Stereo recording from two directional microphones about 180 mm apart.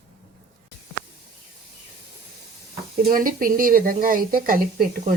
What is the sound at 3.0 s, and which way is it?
A woman's voice, 50° right (ahead or behind).